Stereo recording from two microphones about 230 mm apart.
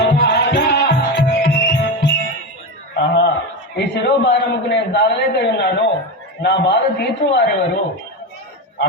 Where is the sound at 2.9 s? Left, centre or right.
Left.